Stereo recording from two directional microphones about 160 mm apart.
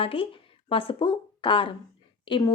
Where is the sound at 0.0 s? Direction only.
35° left (ahead or behind).